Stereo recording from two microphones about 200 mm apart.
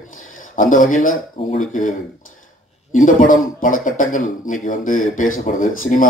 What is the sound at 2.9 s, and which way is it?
Speech, 40° left (ahead or behind).